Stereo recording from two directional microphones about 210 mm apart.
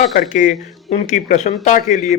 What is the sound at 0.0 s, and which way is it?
A man's voice, 40° left (ahead or behind).